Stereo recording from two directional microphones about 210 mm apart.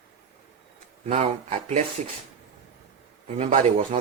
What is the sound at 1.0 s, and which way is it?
Speech, 30° right (ahead or behind).